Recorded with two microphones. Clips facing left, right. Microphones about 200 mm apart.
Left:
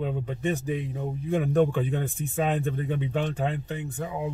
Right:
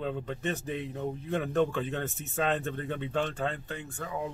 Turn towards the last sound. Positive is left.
turn(degrees=20)  # may be behind; listen again after turning